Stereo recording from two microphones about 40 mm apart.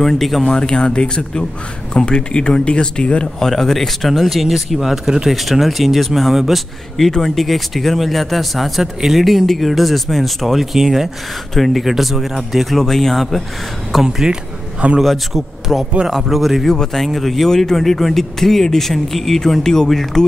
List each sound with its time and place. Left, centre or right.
0.0 s speech: centre
0.6 s speech: left
3.3 s speech: centre
5.3 s speech: centre
16.6 s speech: centre